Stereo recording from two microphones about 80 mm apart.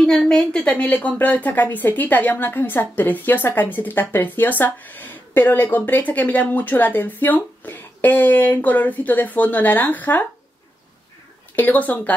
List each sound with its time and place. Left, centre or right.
0.0 s a woman's voice: centre
11.5 s a woman's voice: left